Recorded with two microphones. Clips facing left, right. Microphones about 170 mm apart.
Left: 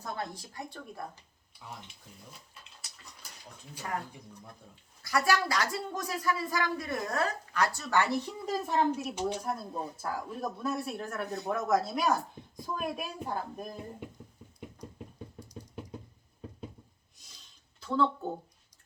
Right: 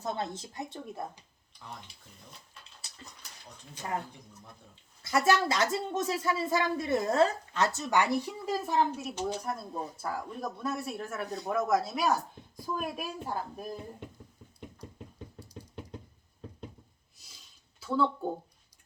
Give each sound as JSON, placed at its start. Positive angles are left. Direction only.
{"t": 0.0, "sound": "a woman's voice", "side_deg": -25}
{"t": 1.5, "sound": "speech", "side_deg": 5}
{"t": 4.7, "sound": "a woman's voice", "side_deg": -25}
{"t": 14.8, "sound": "knock", "side_deg": -5}
{"t": 17.7, "sound": "speech", "side_deg": -10}